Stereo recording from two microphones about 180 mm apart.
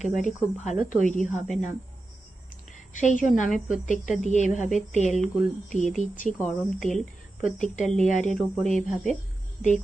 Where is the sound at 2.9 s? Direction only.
45° left (ahead or behind).